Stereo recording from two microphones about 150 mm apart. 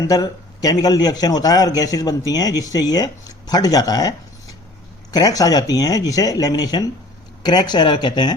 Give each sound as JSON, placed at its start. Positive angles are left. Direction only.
{"t": 0.1, "sound": "a man's voice", "side_deg": 25}
{"t": 5.1, "sound": "a man's voice", "side_deg": 25}